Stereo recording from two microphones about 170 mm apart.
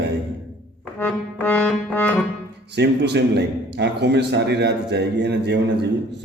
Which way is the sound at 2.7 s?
80° right.